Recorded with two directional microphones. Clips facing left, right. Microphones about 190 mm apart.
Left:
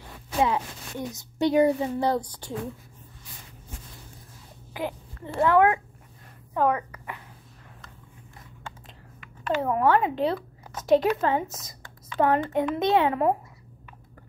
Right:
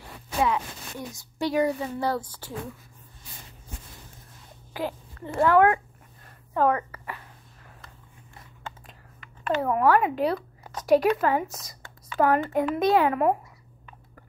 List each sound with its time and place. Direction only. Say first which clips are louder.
0.4 s a woman's voice: left 1 dB; 20° left (ahead or behind)
4.7 s a child's voice: right 1 dB; 20° left (ahead or behind)
9.5 s a child's voice: right 1 dB; 25° left (ahead or behind)